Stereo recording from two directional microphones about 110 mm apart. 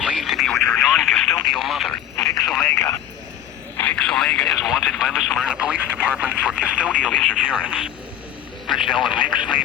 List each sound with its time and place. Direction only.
0.0 s radio: centre (ahead or behind)
2.4 s speech: centre (ahead or behind)
2.6 s speech: 20° left (ahead or behind); by 6.9 s 10° right (ahead or behind)
6.9 s speech: 10° left (ahead or behind)
7.4 s speech: 10° right (ahead or behind)
8.6 s speech: centre (ahead or behind)